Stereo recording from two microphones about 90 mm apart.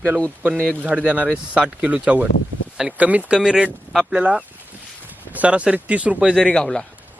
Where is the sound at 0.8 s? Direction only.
15° right (ahead or behind).